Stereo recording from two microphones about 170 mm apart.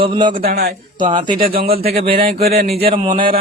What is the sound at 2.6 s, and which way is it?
Speech, 65° right (ahead or behind).